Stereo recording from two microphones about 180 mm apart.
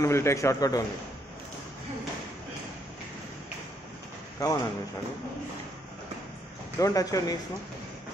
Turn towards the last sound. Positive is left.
turn(degrees=20)  # may be behind; listen again after turning